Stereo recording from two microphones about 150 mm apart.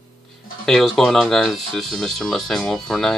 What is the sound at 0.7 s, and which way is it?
Speech, centre (ahead or behind).